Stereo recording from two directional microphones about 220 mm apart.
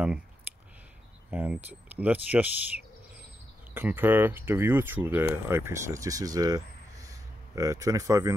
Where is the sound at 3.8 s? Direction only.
10° right (ahead or behind).